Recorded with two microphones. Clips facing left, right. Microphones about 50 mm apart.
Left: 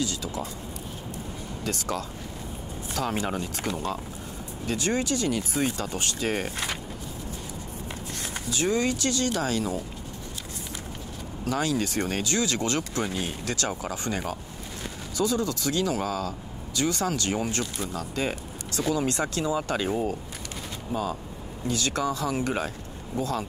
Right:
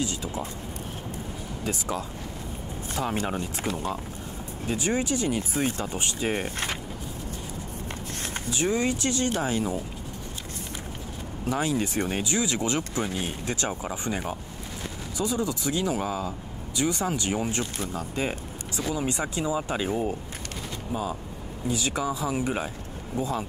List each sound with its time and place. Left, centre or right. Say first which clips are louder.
0.0 s speech: even; right
1.6 s speech: even; centre
8.5 s speech: even; right
11.4 s speech: even; right
20.9 s speech: left 1 dB; centre